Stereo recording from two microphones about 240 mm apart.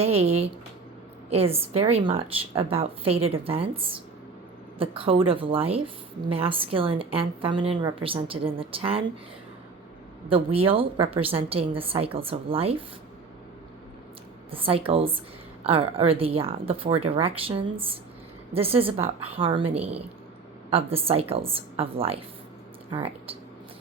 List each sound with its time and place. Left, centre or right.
0.0 s speech: right
10.2 s speech: right
14.5 s speech: right